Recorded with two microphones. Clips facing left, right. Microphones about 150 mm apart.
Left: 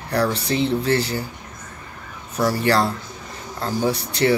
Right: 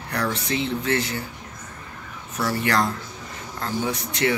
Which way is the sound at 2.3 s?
35° left (ahead or behind).